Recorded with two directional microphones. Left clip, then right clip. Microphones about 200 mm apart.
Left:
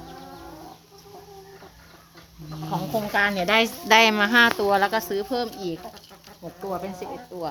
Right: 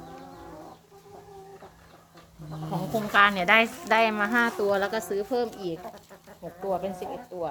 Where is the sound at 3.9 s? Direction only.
60° left (ahead or behind).